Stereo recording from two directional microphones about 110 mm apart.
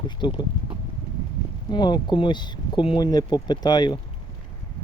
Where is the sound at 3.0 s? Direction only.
35° left (ahead or behind).